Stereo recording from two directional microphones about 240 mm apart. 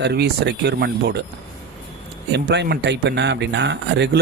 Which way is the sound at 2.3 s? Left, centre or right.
Right.